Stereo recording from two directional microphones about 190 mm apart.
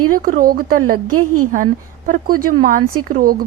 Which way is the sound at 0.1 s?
50° right (ahead or behind).